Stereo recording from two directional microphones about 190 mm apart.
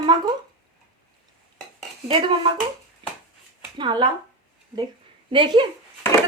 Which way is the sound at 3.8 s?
25° right (ahead or behind).